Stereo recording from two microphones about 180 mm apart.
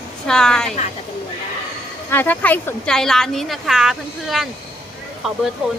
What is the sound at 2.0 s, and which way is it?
A woman's voice, 10° left (ahead or behind).